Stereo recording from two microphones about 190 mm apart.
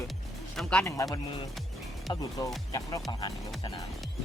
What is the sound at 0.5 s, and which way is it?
Speech, 5° left (ahead or behind).